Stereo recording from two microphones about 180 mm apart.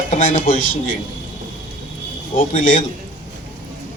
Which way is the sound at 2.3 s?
45° left (ahead or behind).